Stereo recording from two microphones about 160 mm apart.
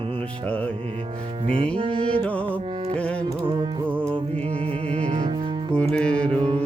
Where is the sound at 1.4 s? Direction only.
35° right (ahead or behind).